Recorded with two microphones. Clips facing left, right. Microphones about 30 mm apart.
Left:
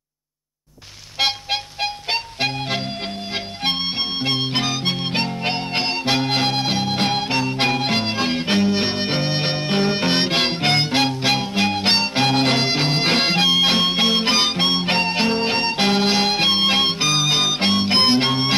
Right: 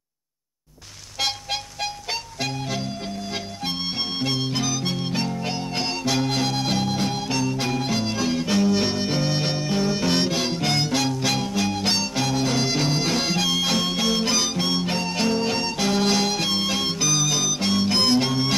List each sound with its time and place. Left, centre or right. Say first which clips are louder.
1.2 s music: left 5 dB; left
4.2 s harmonica: left 3 dB; left
7.0 s harmonica: left 4 dB; left
12.6 s music: left 4 dB; left